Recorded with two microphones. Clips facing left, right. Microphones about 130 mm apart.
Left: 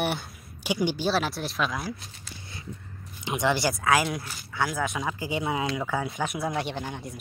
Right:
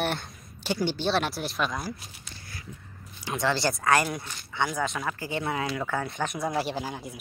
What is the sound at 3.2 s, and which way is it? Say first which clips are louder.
Speech: left 2 dB; 20° left (ahead or behind).